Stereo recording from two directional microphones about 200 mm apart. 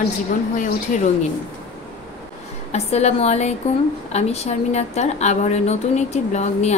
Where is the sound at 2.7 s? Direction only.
35° left (ahead or behind).